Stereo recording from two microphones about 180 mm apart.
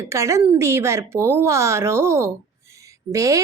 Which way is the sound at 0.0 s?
15° right (ahead or behind).